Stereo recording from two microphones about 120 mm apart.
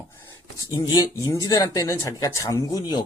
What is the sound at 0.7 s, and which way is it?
Speech, 30° left (ahead or behind).